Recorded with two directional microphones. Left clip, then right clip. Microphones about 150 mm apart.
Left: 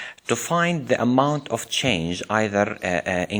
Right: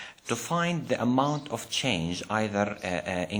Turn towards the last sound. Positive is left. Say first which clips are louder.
# left 7 dB
turn(degrees=40)  # may be behind; listen again after turning